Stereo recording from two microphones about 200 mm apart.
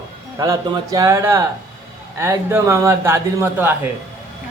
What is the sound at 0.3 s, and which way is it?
A man's voice, 15° right (ahead or behind).